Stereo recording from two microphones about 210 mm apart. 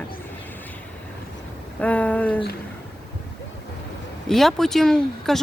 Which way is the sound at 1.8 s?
5° left (ahead or behind).